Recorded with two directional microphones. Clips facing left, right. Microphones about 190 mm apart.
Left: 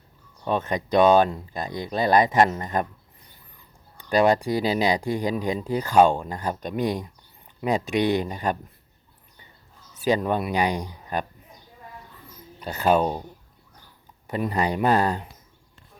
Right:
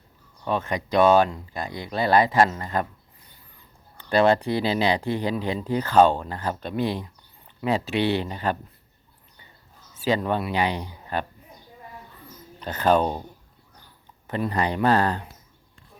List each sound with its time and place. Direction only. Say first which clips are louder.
0.4 s speech: left 1 dB; 20° left (ahead or behind)
3.9 s speech: even; 10° left (ahead or behind)
10.1 s speech: left 1 dB; 15° left (ahead or behind)
12.5 s speech: even; 10° left (ahead or behind)
14.3 s speech: left 1 dB; 10° left (ahead or behind)